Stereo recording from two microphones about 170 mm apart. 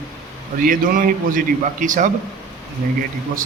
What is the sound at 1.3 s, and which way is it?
Speech, 50° right (ahead or behind).